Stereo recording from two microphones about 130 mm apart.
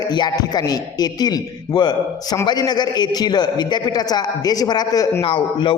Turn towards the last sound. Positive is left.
turn(degrees=40)  # may be behind; listen again after turning